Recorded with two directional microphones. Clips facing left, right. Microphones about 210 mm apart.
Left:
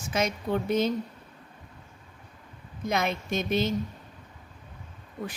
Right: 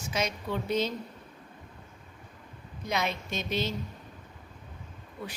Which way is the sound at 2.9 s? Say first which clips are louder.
Left 4 dB; 50° left (ahead or behind).